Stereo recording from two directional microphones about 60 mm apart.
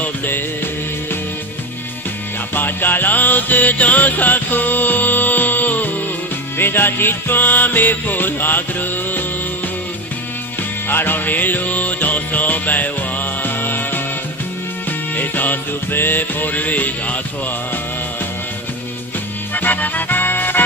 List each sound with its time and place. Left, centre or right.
0.0 s music: left
2.5 s music: left
10.9 s music: left
19.5 s music: left